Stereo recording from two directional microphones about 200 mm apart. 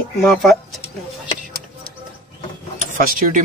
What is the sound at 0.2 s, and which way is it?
Speech, centre (ahead or behind).